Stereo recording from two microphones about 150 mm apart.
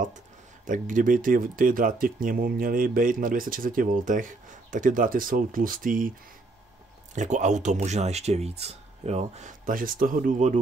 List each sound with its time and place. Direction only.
0.7 s speech: 60° right (ahead or behind)
7.2 s speech: 55° right (ahead or behind)